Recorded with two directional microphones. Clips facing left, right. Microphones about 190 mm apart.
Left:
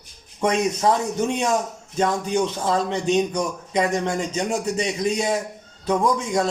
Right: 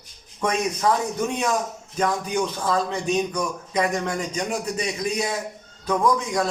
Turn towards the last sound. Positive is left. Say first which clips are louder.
# left 1 dB
turn(degrees=25)  # may be behind; listen again after turning